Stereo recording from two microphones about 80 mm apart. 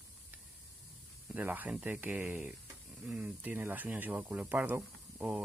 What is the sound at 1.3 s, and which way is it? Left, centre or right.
Speech, right.